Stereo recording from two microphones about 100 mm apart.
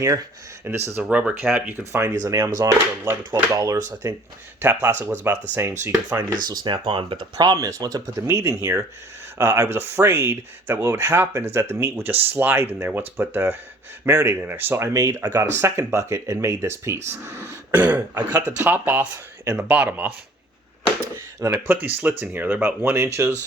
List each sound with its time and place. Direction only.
0.6 s speech: 20° right (ahead or behind)
1.0 s speech: 10° right (ahead or behind)
2.2 s speech: 35° right (ahead or behind)
4.6 s speech: 20° right (ahead or behind)
6.1 s speech: 45° right (ahead or behind); by 19.0 s 20° right (ahead or behind)
19.1 s speech: 30° right (ahead or behind)
19.6 s speech: 15° right (ahead or behind)
21.4 s speech: 20° right (ahead or behind)